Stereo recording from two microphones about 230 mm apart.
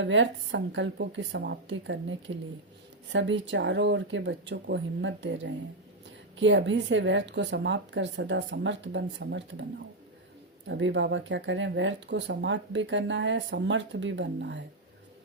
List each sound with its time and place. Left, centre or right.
0.0 s speech: right
10.7 s speech: right